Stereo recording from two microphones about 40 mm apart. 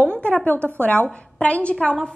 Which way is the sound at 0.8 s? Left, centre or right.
Left.